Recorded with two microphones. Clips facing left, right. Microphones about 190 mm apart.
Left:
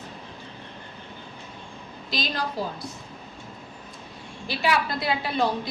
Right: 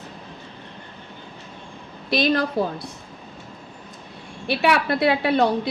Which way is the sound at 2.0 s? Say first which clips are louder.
Right 9 dB; 60° right (ahead or behind).